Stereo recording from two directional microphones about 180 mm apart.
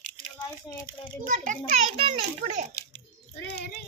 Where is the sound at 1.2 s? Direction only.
45° right (ahead or behind).